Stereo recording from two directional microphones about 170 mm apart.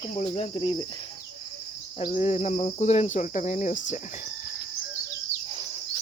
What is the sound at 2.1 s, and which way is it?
Cricket, 40° left (ahead or behind).